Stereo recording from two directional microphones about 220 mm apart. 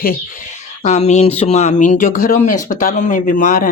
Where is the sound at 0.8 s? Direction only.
30° left (ahead or behind).